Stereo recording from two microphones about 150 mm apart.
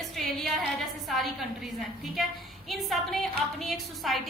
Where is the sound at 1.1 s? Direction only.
Centre (ahead or behind).